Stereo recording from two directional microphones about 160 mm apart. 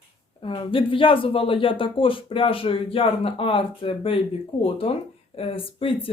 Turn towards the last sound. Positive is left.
turn(degrees=35)  # may be behind; listen again after turning